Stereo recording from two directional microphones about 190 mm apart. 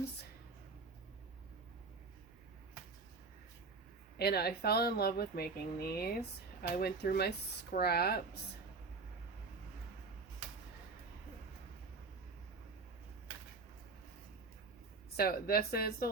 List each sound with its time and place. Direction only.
4.2 s speech: 55° left (ahead or behind)
15.1 s speech: 55° left (ahead or behind)